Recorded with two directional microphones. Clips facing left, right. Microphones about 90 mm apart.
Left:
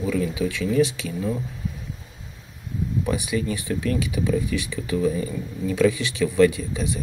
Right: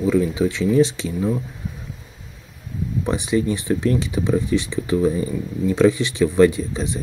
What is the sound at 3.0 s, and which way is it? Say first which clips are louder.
Speech: right 7 dB; 25° right (ahead or behind).